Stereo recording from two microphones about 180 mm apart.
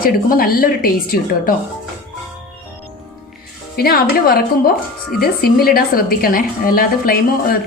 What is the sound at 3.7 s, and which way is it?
A woman's voice, 60° left (ahead or behind).